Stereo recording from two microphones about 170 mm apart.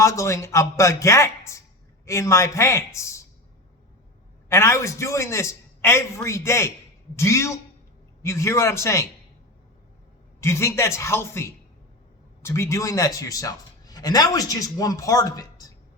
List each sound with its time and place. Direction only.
0.0 s a man's voice: 20° left (ahead or behind)
4.4 s a man's voice: 15° left (ahead or behind)
10.4 s a man's voice: 15° left (ahead or behind)